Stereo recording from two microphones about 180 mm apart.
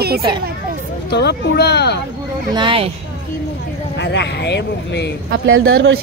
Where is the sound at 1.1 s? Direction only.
70° left (ahead or behind).